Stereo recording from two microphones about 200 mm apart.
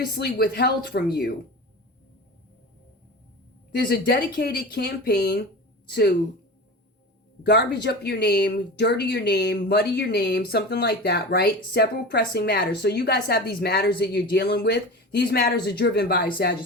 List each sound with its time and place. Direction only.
0.0 s speech: 50° left (ahead or behind)
3.8 s speech: 50° left (ahead or behind)
7.4 s speech: 60° left (ahead or behind)